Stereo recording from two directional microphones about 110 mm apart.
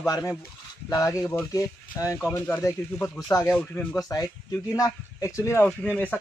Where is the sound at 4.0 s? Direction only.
35° left (ahead or behind).